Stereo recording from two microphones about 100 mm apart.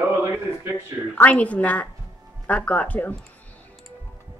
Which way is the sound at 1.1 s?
15° left (ahead or behind).